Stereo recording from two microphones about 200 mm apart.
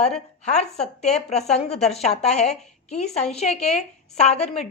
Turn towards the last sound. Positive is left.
turn(degrees=30)  # may be behind; listen again after turning